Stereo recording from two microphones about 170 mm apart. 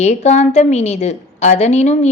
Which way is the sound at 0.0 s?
40° left (ahead or behind).